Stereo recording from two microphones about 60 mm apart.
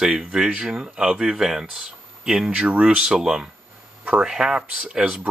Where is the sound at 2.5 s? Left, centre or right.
Right.